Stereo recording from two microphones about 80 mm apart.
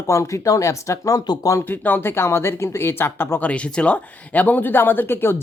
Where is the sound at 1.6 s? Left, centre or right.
Left.